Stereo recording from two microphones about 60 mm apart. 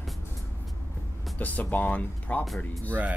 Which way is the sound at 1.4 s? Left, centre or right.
Left.